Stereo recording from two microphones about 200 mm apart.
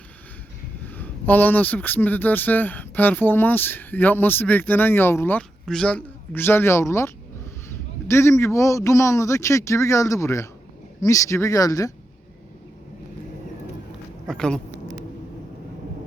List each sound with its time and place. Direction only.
0.9 s a man's voice: 10° left (ahead or behind)
14.3 s speech: 5° left (ahead or behind)